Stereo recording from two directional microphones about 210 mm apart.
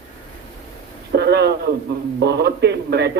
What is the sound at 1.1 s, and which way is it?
A man's voice, 50° right (ahead or behind).